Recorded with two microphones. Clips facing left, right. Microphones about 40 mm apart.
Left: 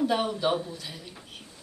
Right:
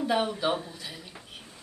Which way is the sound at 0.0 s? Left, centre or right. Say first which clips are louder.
Left 1 dB; centre.